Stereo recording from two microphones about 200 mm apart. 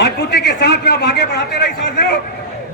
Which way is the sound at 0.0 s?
55° left (ahead or behind).